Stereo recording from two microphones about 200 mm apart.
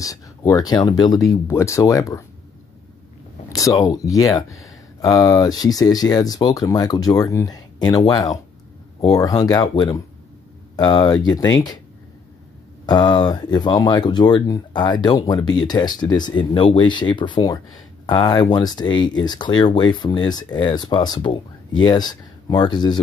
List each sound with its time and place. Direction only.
0.0 s speech: 15° left (ahead or behind)
3.4 s speech: 15° left (ahead or behind)
12.8 s speech: 20° left (ahead or behind)